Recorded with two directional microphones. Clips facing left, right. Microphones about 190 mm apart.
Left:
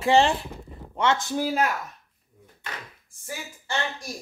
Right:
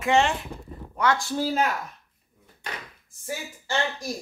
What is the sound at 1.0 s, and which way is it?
Speech, 25° left (ahead or behind).